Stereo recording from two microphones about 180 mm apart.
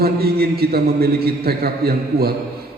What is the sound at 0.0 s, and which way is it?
A man's voice, 60° right (ahead or behind).